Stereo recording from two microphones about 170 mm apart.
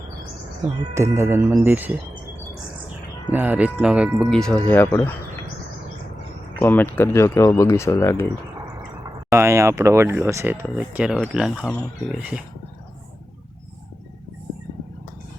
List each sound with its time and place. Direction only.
0.9 s speech: 15° right (ahead or behind)
3.3 s speech: 10° right (ahead or behind); by 5.1 s 10° left (ahead or behind)
6.6 s speech: 10° left (ahead or behind)
9.3 s speech: 15° right (ahead or behind)